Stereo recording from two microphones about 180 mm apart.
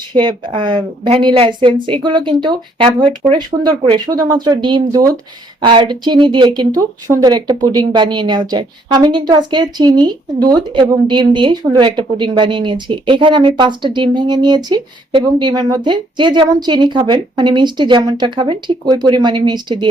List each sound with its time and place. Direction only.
0.1 s a woman's voice: 25° right (ahead or behind)